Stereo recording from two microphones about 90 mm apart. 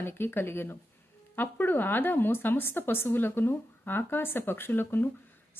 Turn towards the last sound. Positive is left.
turn(degrees=25)  # may be behind; listen again after turning